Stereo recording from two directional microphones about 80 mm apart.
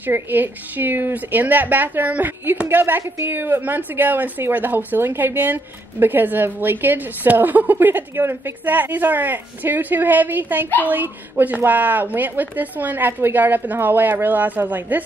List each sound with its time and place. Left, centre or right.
0.0 s a woman's voice: right